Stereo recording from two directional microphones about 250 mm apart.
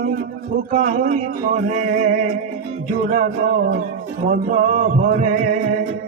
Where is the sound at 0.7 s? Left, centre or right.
Right.